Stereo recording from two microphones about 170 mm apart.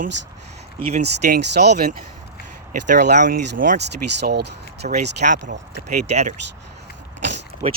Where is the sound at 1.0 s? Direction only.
75° right (ahead or behind).